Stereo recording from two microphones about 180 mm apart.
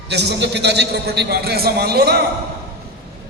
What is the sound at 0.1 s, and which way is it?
A man's voice, 70° right (ahead or behind).